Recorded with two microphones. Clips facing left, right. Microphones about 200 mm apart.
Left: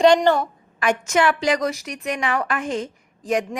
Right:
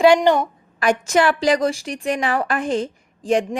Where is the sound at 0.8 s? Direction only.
35° right (ahead or behind).